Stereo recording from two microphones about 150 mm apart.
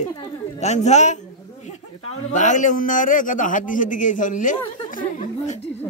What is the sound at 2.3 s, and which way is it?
A man's voice, 55° left (ahead or behind).